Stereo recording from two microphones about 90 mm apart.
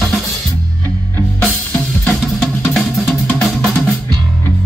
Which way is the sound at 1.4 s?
15° left (ahead or behind).